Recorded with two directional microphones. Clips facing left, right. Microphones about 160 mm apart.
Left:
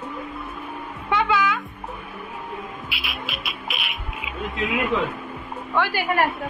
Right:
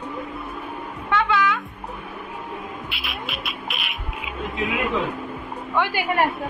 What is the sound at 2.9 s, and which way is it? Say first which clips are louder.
Music: right 1 dB; centre (ahead or behind).